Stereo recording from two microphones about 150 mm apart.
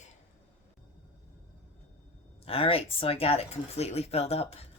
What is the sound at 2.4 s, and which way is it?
Speech, 40° left (ahead or behind).